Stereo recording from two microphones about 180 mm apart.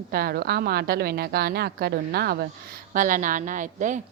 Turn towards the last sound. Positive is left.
turn(degrees=-45)  # may be behind; listen again after turning